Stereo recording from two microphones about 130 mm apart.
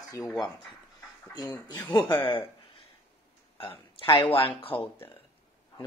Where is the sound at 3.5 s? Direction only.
45° left (ahead or behind).